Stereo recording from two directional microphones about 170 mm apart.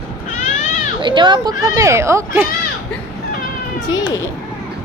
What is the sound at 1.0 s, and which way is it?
Speech, 30° right (ahead or behind).